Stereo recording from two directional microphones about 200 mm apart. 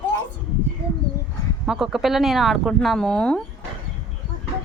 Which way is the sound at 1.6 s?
Centre (ahead or behind).